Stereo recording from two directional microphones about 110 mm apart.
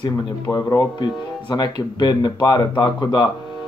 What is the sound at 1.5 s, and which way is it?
A man's voice, 40° left (ahead or behind).